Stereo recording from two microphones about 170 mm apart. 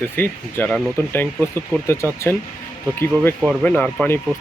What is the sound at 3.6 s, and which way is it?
Speech, 10° left (ahead or behind).